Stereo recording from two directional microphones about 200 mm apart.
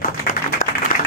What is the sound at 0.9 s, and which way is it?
Applause, 45° left (ahead or behind).